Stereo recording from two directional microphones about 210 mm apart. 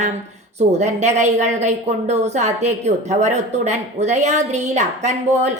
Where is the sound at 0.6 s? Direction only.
30° right (ahead or behind).